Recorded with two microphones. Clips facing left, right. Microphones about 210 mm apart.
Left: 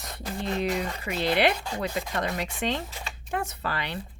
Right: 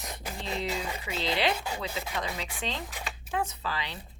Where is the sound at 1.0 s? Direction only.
60° left (ahead or behind).